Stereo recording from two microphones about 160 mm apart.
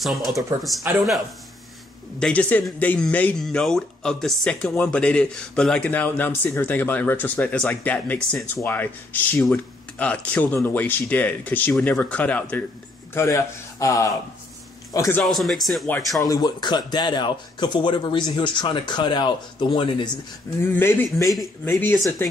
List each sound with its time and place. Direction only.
0.0 s speech: centre (ahead or behind)
0.9 s speech: 15° right (ahead or behind)
2.1 s a man's voice: 5° left (ahead or behind)
15.2 s speech: centre (ahead or behind)
16.2 s speech: 20° left (ahead or behind)
20.6 s speech: 15° left (ahead or behind)